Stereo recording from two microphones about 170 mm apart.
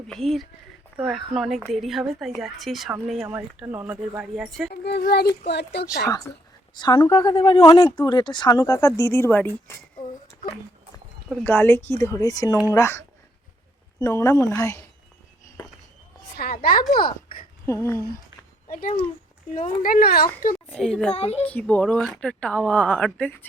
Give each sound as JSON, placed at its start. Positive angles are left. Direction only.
{"t": 0.1, "sound": "speech", "side_deg": 0}
{"t": 4.7, "sound": "speech", "side_deg": 70}
{"t": 5.5, "sound": "speech", "side_deg": 75}
{"t": 6.1, "sound": "speech", "side_deg": 20}
{"t": 11.3, "sound": "speech", "side_deg": 10}
{"t": 16.3, "sound": "a woman's voice", "side_deg": 60}
{"t": 17.7, "sound": "speech", "side_deg": 15}
{"t": 18.7, "sound": "speech", "side_deg": 55}
{"t": 20.7, "sound": "speech", "side_deg": 5}
{"t": 21.1, "sound": "a child's voice", "side_deg": 35}
{"t": 21.4, "sound": "speech", "side_deg": 10}